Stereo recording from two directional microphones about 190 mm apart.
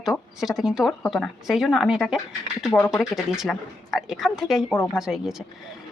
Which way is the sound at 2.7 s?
15° left (ahead or behind).